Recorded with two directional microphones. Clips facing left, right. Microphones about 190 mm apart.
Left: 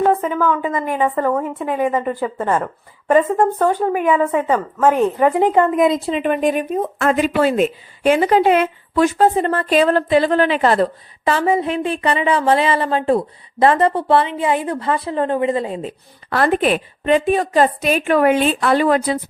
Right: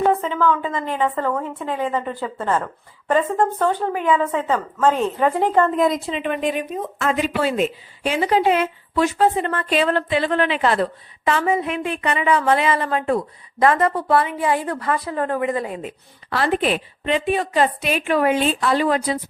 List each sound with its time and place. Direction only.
0.1 s speech: 10° left (ahead or behind)
6.1 s speech: 50° left (ahead or behind); by 15.9 s 25° left (ahead or behind)
16.3 s a woman's voice: 50° left (ahead or behind)